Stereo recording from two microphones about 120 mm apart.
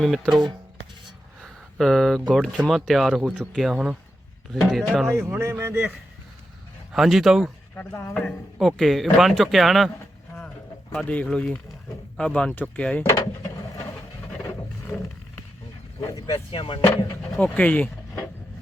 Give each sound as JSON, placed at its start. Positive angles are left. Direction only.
{"t": 0.0, "sound": "speech", "side_deg": 0}
{"t": 1.8, "sound": "speech", "side_deg": 0}
{"t": 5.0, "sound": "speech", "side_deg": -20}
{"t": 6.9, "sound": "speech", "side_deg": 0}
{"t": 7.9, "sound": "speech", "side_deg": 15}
{"t": 8.5, "sound": "speech", "side_deg": 0}
{"t": 10.9, "sound": "speech", "side_deg": 10}
{"t": 14.9, "sound": "roaring cats", "side_deg": 20}
{"t": 16.0, "sound": "speech", "side_deg": 30}
{"t": 16.3, "sound": "speech", "side_deg": 50}
{"t": 17.3, "sound": "speech", "side_deg": 10}